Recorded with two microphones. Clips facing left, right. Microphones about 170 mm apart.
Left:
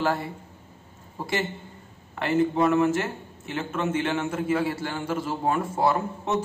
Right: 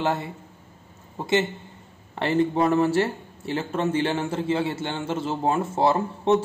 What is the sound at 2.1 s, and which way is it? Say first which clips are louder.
A man's voice: right 1 dB; 30° right (ahead or behind).